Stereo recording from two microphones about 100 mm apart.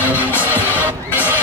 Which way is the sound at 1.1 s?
20° left (ahead or behind).